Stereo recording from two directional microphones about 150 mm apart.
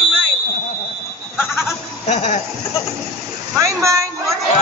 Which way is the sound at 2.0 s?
55° left (ahead or behind).